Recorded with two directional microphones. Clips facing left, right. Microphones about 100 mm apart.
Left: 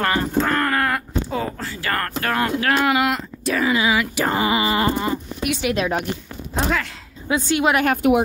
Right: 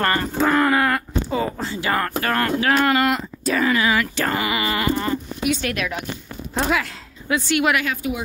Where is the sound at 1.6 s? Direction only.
20° right (ahead or behind).